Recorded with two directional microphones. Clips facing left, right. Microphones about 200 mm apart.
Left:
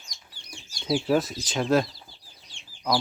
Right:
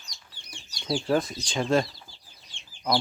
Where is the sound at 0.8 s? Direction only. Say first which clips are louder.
Left 2 dB; 5° left (ahead or behind).